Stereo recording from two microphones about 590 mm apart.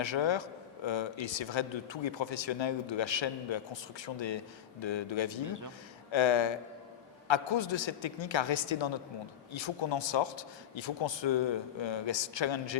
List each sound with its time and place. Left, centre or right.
0.0 s a man's voice: left
5.5 s a man's voice: right
6.1 s a man's voice: left